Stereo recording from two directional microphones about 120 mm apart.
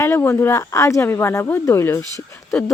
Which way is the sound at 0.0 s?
20° left (ahead or behind).